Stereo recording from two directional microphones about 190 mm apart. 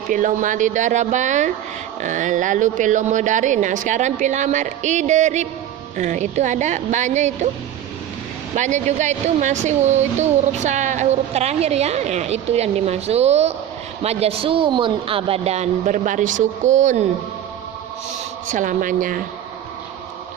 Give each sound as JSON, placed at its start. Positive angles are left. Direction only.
{"t": 0.1, "sound": "speech", "side_deg": -45}
{"t": 8.5, "sound": "speech", "side_deg": -40}
{"t": 18.4, "sound": "a woman's voice", "side_deg": -40}